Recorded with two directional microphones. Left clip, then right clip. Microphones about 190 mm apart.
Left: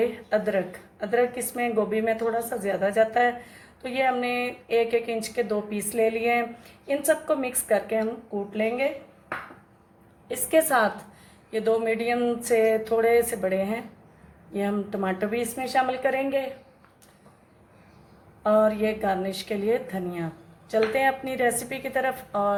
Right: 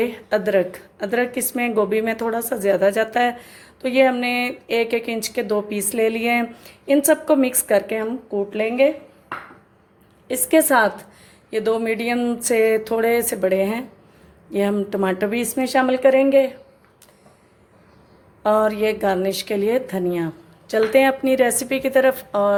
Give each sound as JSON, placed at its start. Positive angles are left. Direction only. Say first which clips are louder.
{"t": 0.0, "sound": "speech", "louder": "right 4 dB", "side_deg": -55}
{"t": 10.2, "sound": "speech", "louder": "right 5 dB", "side_deg": -45}
{"t": 18.4, "sound": "speech", "louder": "right 4 dB", "side_deg": -50}